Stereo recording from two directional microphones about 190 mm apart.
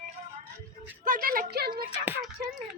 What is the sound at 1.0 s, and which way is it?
Speech, 45° right (ahead or behind).